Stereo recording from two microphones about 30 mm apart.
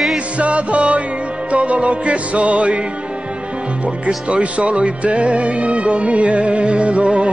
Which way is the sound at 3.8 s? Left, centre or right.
Right.